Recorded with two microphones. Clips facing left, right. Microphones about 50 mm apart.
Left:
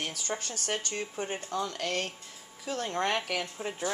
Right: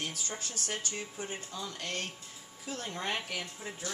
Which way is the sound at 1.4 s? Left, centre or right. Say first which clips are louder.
Left 7 dB; left.